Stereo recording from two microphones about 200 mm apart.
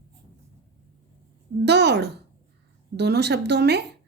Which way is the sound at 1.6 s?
55° right (ahead or behind).